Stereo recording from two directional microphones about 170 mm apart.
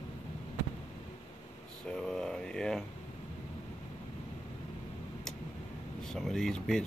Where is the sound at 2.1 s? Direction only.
5° left (ahead or behind).